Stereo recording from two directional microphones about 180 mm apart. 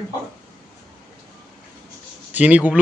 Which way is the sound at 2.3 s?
10° right (ahead or behind).